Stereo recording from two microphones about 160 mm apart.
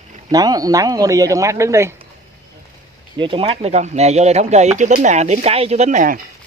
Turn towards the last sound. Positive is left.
turn(degrees=-55)  # may be behind; listen again after turning